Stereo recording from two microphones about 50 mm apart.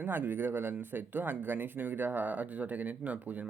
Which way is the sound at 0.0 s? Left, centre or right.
Right.